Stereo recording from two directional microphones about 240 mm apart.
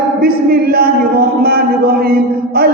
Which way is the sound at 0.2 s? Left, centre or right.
Right.